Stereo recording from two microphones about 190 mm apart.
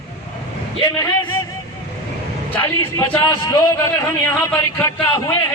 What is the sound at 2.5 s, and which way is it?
A man's voice, 15° left (ahead or behind).